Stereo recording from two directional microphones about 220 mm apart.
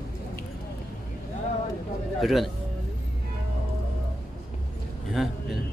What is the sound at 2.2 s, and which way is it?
Speech, centre (ahead or behind).